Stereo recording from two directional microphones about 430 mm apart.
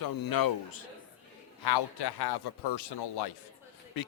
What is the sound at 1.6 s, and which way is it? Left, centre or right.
A man's voice, left.